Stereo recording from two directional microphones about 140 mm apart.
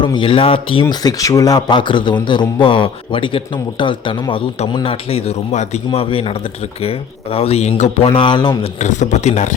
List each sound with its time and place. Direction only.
0.0 s a man's voice: 35° left (ahead or behind)
8.6 s speech: 60° left (ahead or behind)